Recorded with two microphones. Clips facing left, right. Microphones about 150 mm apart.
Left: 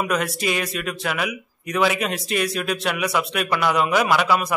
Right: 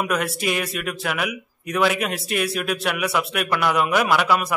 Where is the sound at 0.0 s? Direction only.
Centre (ahead or behind).